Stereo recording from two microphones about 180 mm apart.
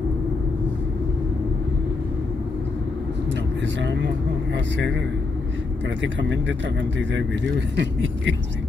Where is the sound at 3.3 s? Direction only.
80° right.